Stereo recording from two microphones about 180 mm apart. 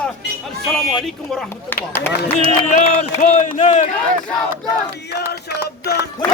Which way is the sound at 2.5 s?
35° left (ahead or behind).